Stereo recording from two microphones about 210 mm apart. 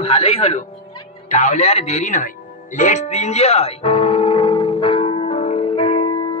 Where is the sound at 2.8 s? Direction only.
35° left (ahead or behind).